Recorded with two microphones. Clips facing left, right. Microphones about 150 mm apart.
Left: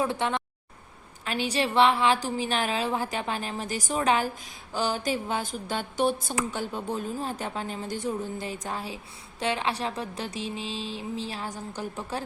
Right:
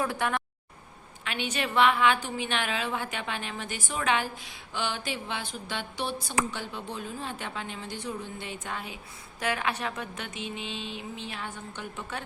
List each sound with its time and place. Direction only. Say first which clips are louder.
0.0 s speech: left 2 dB; 25° left (ahead or behind)
1.2 s a woman's voice: left 4 dB; 35° left (ahead or behind)
4.7 s a sound: left 5 dB; 40° left (ahead or behind)
6.5 s a woman's voice: left 6 dB; 45° left (ahead or behind)